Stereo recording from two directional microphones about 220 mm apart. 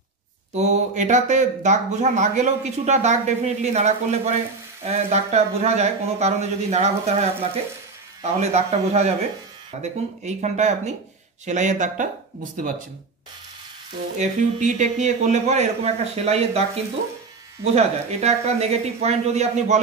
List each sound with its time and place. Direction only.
0.6 s speech: 35° right (ahead or behind)
8.2 s speech: 30° right (ahead or behind)
14.1 s speech: 35° right (ahead or behind)
17.7 s speech: 30° right (ahead or behind)